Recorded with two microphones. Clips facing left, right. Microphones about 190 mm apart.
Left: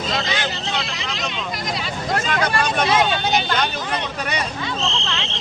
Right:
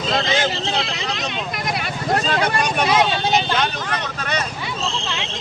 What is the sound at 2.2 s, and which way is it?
Speech, 30° right (ahead or behind).